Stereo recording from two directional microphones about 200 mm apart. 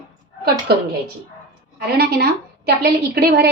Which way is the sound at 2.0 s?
55° right (ahead or behind).